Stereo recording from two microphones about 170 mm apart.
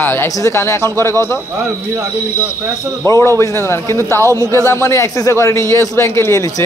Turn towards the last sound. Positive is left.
turn(degrees=15)  # may be behind; listen again after turning